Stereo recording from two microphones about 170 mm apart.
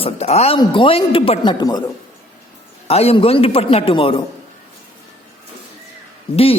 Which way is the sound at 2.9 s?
35° left (ahead or behind).